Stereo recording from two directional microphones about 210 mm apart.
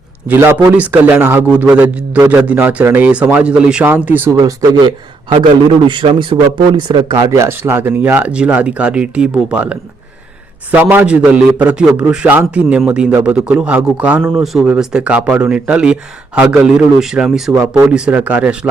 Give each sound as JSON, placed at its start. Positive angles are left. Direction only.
{"t": 0.3, "sound": "a man's voice", "side_deg": -10}